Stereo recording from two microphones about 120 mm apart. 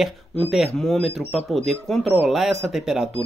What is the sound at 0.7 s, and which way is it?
Speech, 5° left (ahead or behind).